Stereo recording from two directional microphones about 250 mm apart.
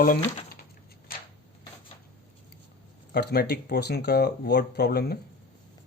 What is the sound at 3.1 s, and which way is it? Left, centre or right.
Speech, left.